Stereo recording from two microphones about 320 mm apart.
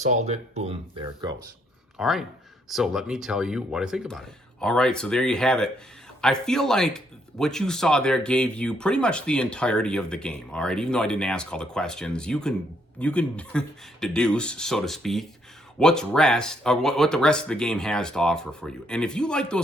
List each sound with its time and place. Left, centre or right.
0.0 s speech: right
2.0 s speech: centre